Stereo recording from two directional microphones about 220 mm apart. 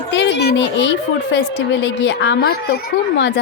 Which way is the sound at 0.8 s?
55° left (ahead or behind).